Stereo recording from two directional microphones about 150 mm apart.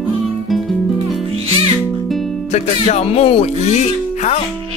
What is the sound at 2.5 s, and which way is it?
Speech, 45° left (ahead or behind).